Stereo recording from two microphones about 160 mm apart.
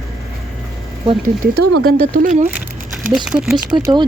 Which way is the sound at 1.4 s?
70° right (ahead or behind).